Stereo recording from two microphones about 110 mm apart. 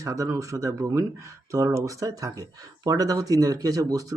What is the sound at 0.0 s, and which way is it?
Speech, 30° right (ahead or behind).